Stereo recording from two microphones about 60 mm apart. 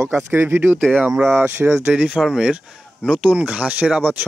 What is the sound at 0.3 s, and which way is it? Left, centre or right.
Speech, right.